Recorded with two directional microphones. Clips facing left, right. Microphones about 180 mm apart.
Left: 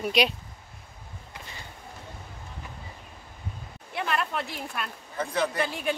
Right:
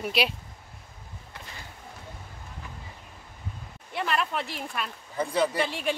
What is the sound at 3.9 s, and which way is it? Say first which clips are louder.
Speech: right 1 dB; centre (ahead or behind).